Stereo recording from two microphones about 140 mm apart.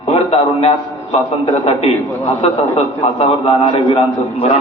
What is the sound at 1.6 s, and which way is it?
A man's voice, 45° left (ahead or behind).